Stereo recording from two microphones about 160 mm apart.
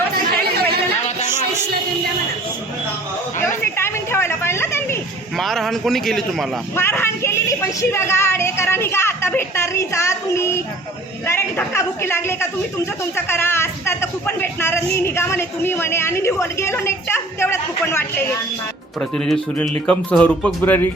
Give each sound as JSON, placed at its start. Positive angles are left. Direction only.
{"t": 3.6, "sound": "a sound", "side_deg": 15}
{"t": 5.4, "sound": "speech", "side_deg": 0}
{"t": 6.7, "sound": "a woman's voice", "side_deg": 15}
{"t": 19.1, "sound": "speech", "side_deg": 5}